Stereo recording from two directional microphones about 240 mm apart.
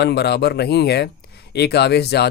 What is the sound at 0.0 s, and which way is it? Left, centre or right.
Speech, left.